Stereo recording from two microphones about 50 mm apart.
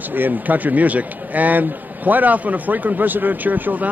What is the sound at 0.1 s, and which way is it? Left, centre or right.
Speech, right.